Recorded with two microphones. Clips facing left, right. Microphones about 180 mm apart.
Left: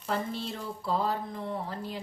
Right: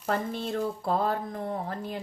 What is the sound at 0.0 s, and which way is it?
Speech, 55° right (ahead or behind).